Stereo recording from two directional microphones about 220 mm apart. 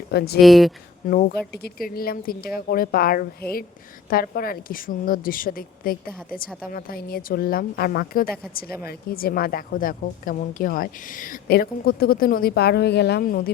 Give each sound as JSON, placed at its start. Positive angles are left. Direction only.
{"t": 0.1, "sound": "speech", "side_deg": 45}
{"t": 0.3, "sound": "speech", "side_deg": 0}
{"t": 1.0, "sound": "a woman's voice", "side_deg": 40}